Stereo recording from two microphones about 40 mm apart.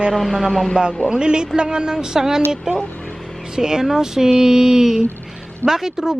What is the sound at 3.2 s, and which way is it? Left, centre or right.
Vehicle, centre.